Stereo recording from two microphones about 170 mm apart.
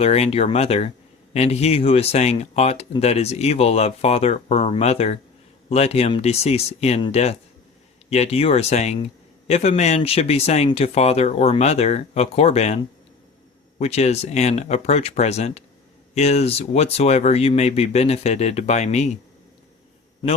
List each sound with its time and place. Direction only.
0.0 s speech: 35° left (ahead or behind)